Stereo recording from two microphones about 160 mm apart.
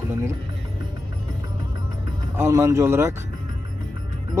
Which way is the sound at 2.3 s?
15° right (ahead or behind).